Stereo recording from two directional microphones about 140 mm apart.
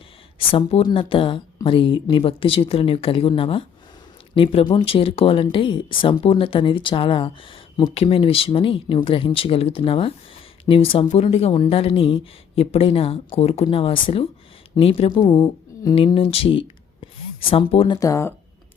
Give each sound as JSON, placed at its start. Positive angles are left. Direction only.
{"t": 0.3, "sound": "speech", "side_deg": 40}
{"t": 15.2, "sound": "a sound", "side_deg": 30}
{"t": 16.1, "sound": "speech", "side_deg": 45}
{"t": 17.9, "sound": "speech", "side_deg": 25}